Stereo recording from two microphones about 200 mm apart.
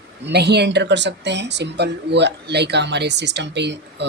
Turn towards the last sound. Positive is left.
turn(degrees=-60)  # may be behind; listen again after turning